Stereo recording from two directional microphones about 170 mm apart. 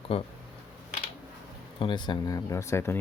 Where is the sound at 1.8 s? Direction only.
25° left (ahead or behind).